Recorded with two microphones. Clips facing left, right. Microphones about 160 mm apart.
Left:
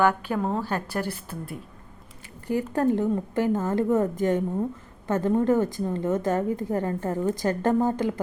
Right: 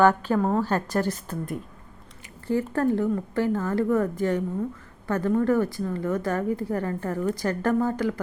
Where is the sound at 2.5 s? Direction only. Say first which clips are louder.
Even; 15° left (ahead or behind).